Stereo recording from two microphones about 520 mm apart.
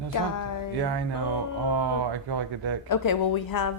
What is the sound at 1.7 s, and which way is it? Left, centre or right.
Speech, right.